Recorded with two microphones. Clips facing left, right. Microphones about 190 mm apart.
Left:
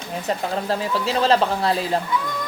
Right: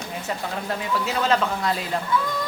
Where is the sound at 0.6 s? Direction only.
35° left (ahead or behind).